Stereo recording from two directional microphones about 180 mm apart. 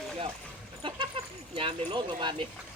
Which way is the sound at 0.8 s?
30° right (ahead or behind).